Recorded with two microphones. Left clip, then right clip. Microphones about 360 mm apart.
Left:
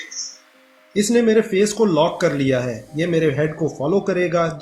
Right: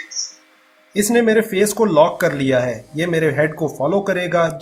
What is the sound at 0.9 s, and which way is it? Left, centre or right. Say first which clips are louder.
Speech: right 1 dB; right.